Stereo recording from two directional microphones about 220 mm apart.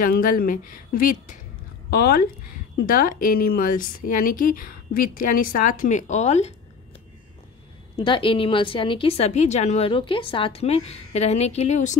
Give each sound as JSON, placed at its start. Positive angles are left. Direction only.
{"t": 0.0, "sound": "a woman's voice", "side_deg": 40}
{"t": 7.9, "sound": "a woman's voice", "side_deg": 20}